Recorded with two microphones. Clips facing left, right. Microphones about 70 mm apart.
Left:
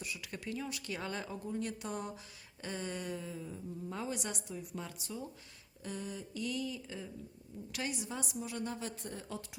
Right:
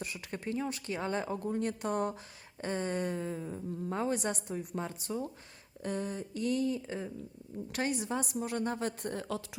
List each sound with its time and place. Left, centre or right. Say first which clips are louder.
0.0 s speech: right 4 dB; right
1.5 s a woman's voice: right 4 dB; right